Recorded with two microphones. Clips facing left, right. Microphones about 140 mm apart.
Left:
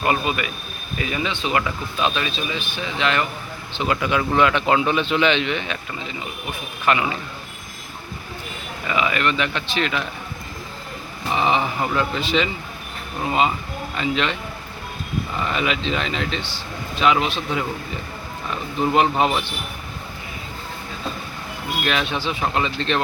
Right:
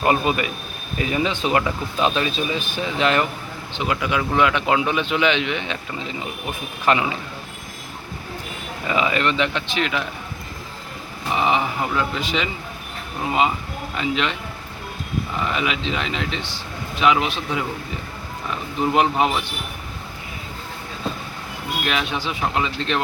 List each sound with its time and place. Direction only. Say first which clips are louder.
0.0 s speech: right 2 dB; 35° right (ahead or behind)
3.7 s speech: left 2 dB; 10° right (ahead or behind)
6.9 s speech: right 1 dB; 30° right (ahead or behind)
8.9 s speech: right 1 dB; 30° right (ahead or behind); by 10.0 s 15° right (ahead or behind)
11.3 s speech: even; 10° right (ahead or behind)
13.9 s speech: even; 10° right (ahead or behind)
15.5 s speech: left 4 dB; 10° right (ahead or behind)
18.8 s speech: even; 10° right (ahead or behind)
21.8 s speech: left 2 dB; 10° right (ahead or behind)